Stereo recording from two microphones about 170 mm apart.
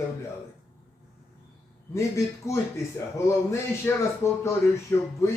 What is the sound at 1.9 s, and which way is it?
Speech, 15° left (ahead or behind).